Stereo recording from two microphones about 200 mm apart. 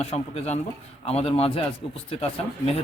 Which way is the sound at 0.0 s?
30° left (ahead or behind).